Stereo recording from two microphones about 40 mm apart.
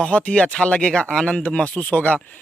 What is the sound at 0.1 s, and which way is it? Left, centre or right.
Speech, left.